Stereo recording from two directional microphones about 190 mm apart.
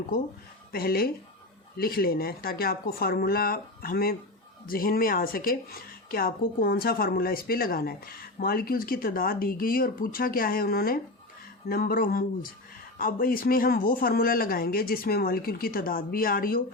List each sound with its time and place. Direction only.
0.7 s speech: 50° left (ahead or behind)